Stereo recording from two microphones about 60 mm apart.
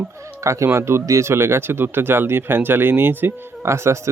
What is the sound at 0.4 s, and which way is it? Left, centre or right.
Speech, right.